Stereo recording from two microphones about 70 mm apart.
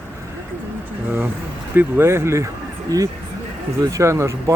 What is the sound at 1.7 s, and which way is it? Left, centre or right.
Speech, right.